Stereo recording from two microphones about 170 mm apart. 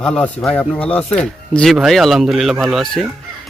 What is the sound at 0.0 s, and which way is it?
Speech, 5° left (ahead or behind).